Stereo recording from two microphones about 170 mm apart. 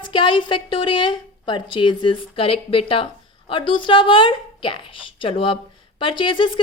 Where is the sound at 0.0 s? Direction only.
30° left (ahead or behind).